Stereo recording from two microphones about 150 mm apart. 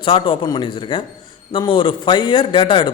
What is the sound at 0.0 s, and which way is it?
Speech, 35° left (ahead or behind).